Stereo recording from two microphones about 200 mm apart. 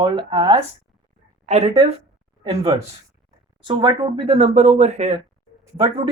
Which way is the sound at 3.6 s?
20° right (ahead or behind).